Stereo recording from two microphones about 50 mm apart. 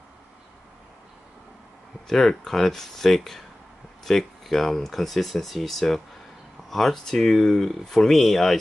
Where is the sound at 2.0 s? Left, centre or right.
Centre.